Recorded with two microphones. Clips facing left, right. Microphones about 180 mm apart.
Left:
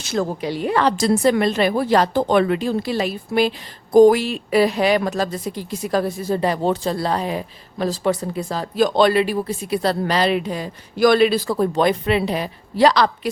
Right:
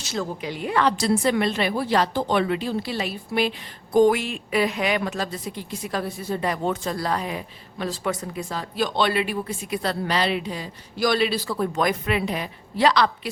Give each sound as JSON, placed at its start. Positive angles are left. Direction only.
{"t": 0.0, "sound": "a woman's voice", "side_deg": 55}
{"t": 0.4, "sound": "a woman's voice", "side_deg": 35}